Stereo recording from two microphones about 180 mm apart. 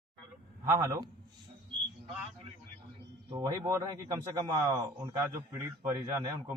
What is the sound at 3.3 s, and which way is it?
A man's voice, 15° right (ahead or behind).